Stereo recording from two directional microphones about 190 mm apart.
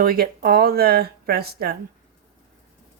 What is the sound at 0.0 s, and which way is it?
Speech, 50° right (ahead or behind).